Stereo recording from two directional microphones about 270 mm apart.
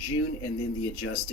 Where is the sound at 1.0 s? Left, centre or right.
Left.